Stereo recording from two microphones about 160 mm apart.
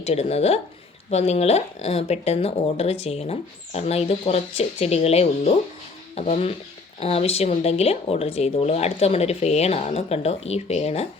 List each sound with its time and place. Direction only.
0.0 s speech: 40° left (ahead or behind)